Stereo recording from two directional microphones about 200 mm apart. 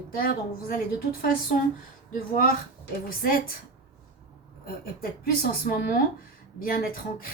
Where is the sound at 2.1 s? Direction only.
45° left (ahead or behind).